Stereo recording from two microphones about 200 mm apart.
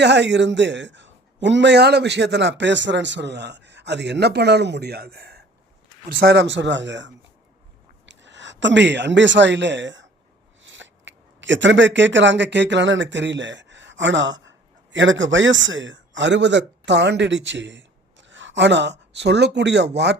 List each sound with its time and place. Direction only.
0.0 s a man's voice: 60° right (ahead or behind)